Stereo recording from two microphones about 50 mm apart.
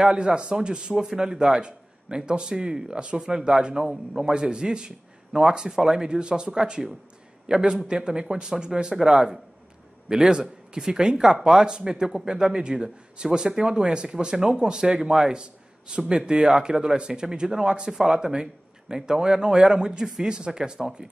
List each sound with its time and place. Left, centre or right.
0.0 s a man's voice: centre